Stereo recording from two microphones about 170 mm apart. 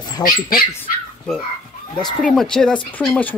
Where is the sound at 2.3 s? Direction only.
5° left (ahead or behind).